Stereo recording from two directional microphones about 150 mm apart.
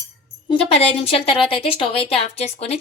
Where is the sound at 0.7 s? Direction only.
40° left (ahead or behind).